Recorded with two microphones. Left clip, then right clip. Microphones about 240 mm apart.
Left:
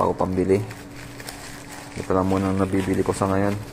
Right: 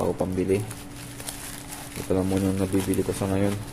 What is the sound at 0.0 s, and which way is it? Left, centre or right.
Speech, centre.